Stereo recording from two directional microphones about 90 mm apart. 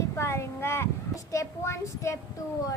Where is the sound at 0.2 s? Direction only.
30° left (ahead or behind).